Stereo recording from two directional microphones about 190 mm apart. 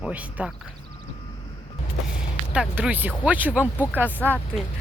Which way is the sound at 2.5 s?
5° right (ahead or behind).